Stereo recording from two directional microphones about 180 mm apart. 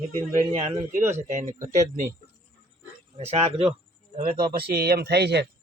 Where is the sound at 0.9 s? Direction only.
15° right (ahead or behind).